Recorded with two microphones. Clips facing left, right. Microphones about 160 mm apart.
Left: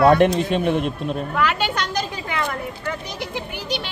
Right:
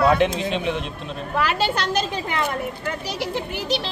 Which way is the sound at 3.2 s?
Centre (ahead or behind).